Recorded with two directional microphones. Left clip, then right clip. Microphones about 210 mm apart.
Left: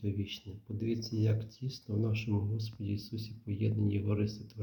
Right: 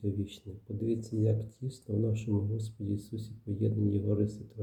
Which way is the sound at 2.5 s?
20° left (ahead or behind).